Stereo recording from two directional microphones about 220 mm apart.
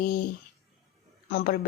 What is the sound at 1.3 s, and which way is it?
Speech, 45° left (ahead or behind).